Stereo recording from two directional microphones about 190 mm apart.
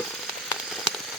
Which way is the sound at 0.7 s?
Centre (ahead or behind).